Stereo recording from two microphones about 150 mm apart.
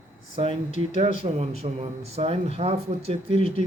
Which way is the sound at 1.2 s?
40° right (ahead or behind).